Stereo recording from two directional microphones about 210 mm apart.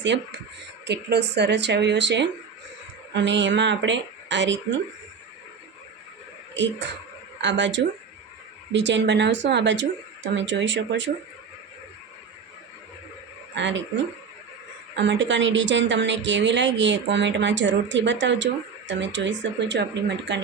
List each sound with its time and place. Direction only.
0.0 s a woman's voice: 55° right (ahead or behind)
6.5 s a woman's voice: 60° right (ahead or behind)
13.6 s a woman's voice: 60° right (ahead or behind)